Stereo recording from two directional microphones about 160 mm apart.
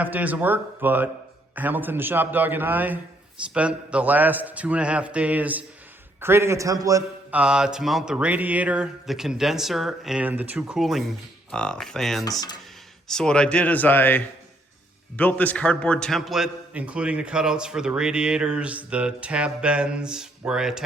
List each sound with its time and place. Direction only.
0.0 s a man's voice: 10° right (ahead or behind)
7.3 s a man's voice: 5° right (ahead or behind)